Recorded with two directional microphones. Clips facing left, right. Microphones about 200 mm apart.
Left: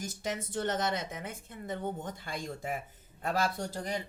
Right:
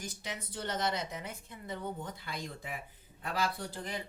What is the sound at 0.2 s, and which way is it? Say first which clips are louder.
Speech: left 10 dB; 45° left (ahead or behind).